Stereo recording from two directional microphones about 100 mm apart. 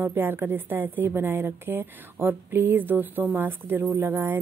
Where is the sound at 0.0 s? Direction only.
20° right (ahead or behind).